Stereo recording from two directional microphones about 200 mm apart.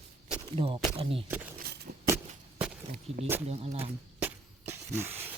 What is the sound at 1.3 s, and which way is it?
Speech, 10° right (ahead or behind).